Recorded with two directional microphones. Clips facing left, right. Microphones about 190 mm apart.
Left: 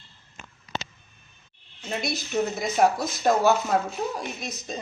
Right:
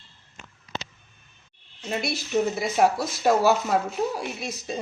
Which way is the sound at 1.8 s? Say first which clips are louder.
Right 1 dB; 5° right (ahead or behind).